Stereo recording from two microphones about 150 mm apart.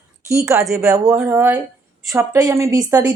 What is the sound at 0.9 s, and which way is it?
Speech, 20° right (ahead or behind).